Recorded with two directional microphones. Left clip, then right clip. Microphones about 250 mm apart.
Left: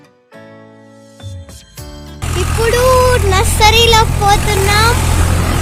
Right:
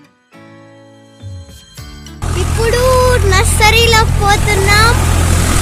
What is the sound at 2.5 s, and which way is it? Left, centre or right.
Speech, left.